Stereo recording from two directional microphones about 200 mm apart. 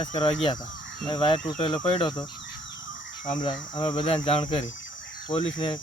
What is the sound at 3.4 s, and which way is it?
Speech, 25° left (ahead or behind).